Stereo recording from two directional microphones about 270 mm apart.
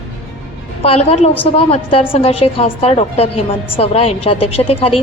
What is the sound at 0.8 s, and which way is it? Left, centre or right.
A woman's voice, left.